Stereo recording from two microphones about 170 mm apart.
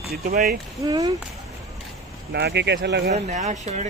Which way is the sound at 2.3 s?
80° right.